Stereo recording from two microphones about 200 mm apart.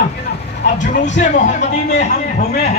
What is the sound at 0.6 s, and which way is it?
A man's voice, 40° left (ahead or behind).